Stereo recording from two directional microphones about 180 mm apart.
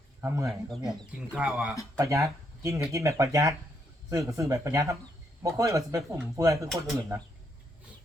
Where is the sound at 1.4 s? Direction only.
5° right (ahead or behind).